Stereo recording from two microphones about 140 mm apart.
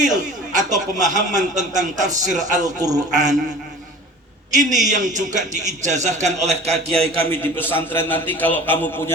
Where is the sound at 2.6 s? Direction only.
25° right (ahead or behind).